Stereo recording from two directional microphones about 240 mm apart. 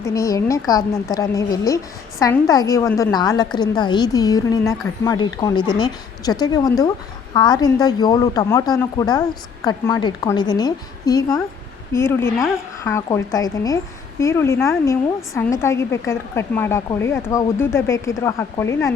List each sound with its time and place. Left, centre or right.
0.0 s a woman's voice: centre